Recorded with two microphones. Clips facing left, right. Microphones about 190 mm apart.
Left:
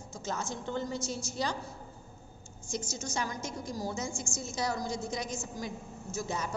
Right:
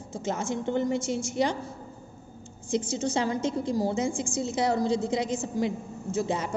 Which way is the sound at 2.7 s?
25° right (ahead or behind).